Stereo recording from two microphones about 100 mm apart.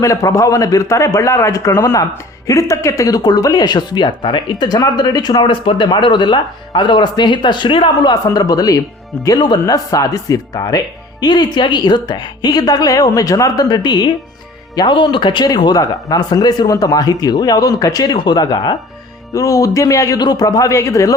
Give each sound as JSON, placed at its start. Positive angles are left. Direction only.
{"t": 0.0, "sound": "speech", "side_deg": 35}
{"t": 8.1, "sound": "speech", "side_deg": 40}